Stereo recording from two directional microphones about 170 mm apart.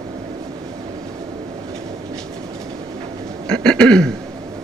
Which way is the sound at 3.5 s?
5° left (ahead or behind).